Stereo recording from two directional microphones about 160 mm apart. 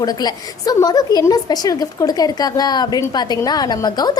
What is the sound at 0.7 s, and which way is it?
A woman's voice, 25° left (ahead or behind).